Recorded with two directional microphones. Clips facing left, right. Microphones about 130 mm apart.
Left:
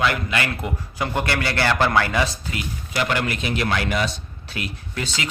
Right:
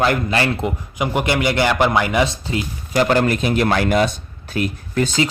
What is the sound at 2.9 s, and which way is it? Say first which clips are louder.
Speech: right 8 dB; 40° right (ahead or behind).